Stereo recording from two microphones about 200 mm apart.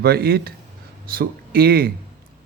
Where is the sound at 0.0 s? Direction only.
50° right (ahead or behind).